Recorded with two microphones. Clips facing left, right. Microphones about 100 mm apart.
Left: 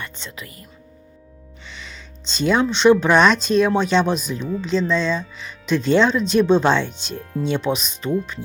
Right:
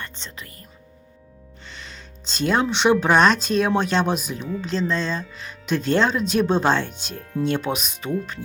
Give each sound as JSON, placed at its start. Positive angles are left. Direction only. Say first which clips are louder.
{"t": 0.2, "sound": "speech", "louder": "left 3 dB", "side_deg": -30}
{"t": 1.7, "sound": "speech", "louder": "left 2 dB", "side_deg": 0}